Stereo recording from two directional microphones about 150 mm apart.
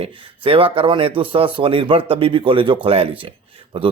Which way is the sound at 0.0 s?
40° right (ahead or behind).